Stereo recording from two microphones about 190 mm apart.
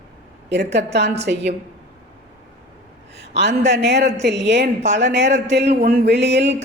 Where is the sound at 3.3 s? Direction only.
65° right (ahead or behind).